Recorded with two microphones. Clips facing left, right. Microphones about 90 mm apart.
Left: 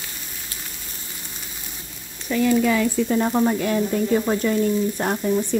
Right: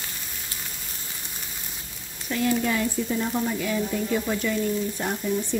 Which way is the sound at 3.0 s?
60° left (ahead or behind).